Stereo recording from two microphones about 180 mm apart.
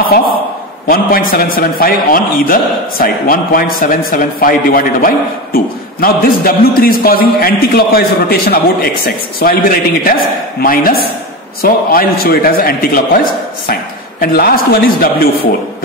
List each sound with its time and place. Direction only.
0.8 s a man's voice: 55° left (ahead or behind)
14.2 s a man's voice: 55° left (ahead or behind)